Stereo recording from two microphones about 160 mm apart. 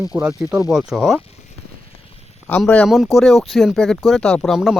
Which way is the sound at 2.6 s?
5° left (ahead or behind).